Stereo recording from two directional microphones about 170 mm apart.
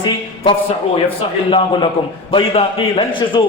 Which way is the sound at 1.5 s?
30° left (ahead or behind).